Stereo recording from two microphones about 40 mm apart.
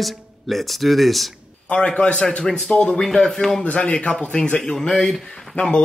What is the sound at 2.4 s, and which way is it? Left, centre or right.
A man's voice, left.